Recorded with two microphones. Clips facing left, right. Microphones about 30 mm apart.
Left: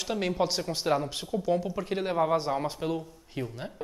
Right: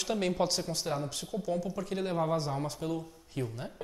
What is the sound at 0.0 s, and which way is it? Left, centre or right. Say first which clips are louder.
Speech: left 2 dB; centre.